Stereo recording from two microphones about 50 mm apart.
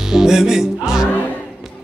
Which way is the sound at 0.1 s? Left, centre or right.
Centre.